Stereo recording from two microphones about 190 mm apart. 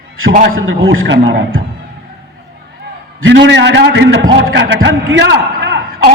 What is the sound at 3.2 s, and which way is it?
A man's voice, 70° right (ahead or behind).